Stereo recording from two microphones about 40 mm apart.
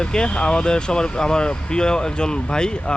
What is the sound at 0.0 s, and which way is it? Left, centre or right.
Speech, left.